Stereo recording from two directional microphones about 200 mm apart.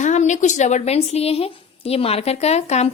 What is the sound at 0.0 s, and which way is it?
A woman's voice, 35° left (ahead or behind).